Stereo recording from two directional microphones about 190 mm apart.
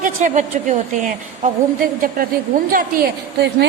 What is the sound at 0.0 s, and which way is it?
A woman's voice, 40° right (ahead or behind).